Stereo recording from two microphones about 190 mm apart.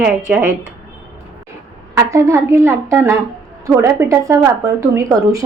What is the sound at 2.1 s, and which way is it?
A woman's voice, 15° right (ahead or behind).